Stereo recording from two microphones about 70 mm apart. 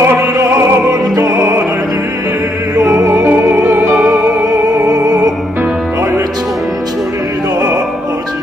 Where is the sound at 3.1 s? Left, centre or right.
Right.